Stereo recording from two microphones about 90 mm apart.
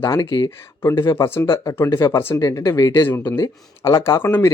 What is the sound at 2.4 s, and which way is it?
Speech, 40° left (ahead or behind).